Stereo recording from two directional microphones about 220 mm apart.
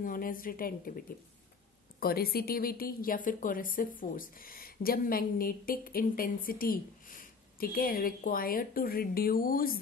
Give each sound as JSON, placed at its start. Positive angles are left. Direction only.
{"t": 0.0, "sound": "speech", "side_deg": 40}